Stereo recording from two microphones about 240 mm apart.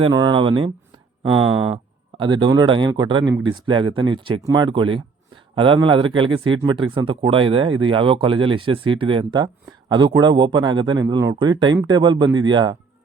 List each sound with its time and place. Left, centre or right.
0.0 s speech: centre
1.7 s a man's voice: centre